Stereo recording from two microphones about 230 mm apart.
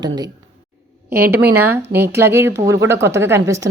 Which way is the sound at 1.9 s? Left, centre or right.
Centre.